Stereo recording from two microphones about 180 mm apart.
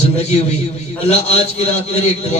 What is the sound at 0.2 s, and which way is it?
A man's voice, 35° left (ahead or behind).